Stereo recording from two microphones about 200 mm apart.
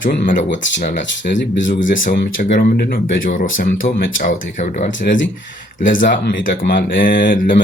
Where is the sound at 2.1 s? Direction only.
50° left (ahead or behind).